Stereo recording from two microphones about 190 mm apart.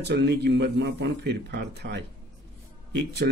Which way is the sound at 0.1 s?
60° right (ahead or behind).